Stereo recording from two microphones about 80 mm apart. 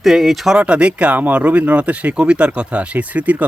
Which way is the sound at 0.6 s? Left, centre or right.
Centre.